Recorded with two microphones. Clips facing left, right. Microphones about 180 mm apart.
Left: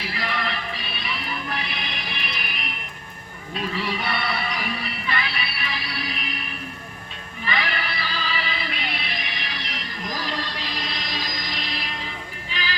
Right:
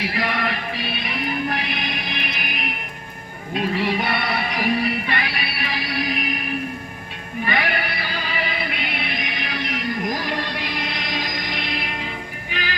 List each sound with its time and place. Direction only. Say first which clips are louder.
0.0 s music: right 5 dB; 55° right (ahead or behind)
3.8 s music: right 5 dB; 55° right (ahead or behind)
7.4 s music: right 4 dB; 50° right (ahead or behind)